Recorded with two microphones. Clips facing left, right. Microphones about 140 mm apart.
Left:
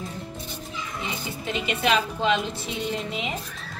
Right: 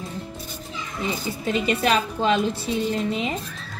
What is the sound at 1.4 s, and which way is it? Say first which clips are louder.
A woman's voice: right 4 dB; 40° right (ahead or behind).